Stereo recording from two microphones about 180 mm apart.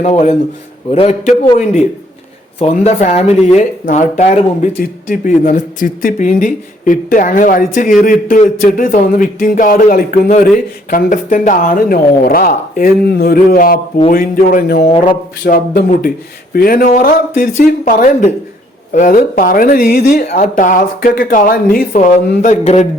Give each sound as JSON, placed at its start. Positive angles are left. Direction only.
{"t": 0.0, "sound": "speech", "side_deg": 40}
{"t": 2.6, "sound": "speech", "side_deg": 40}
{"t": 22.1, "sound": "speech", "side_deg": 40}